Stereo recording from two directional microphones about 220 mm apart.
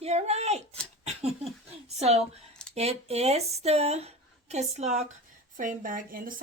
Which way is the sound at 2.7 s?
30° right (ahead or behind).